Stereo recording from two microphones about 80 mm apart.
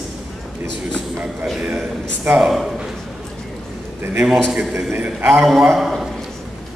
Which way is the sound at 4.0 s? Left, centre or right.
Right.